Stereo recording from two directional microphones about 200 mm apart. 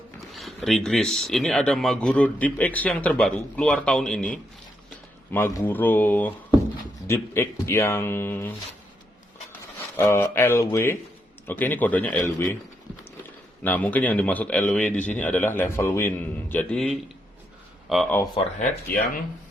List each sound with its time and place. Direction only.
0.3 s a man's voice: centre (ahead or behind)
5.3 s speech: 10° left (ahead or behind)
10.0 s speech: 10° left (ahead or behind)
13.6 s speech: 10° left (ahead or behind)
18.4 s speech: 30° left (ahead or behind)